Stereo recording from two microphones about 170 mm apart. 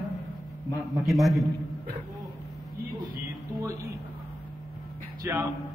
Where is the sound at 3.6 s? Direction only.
20° right (ahead or behind).